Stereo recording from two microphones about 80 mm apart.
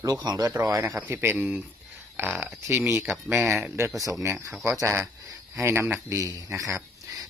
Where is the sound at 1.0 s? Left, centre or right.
Right.